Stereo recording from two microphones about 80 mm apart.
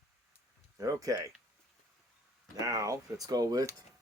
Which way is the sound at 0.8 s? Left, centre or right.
Right.